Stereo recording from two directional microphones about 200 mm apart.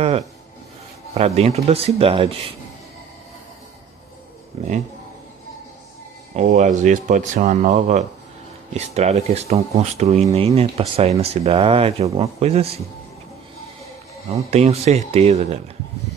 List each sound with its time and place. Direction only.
1.1 s speech: 30° right (ahead or behind)
6.3 s speech: 35° right (ahead or behind)
14.3 s speech: 30° right (ahead or behind)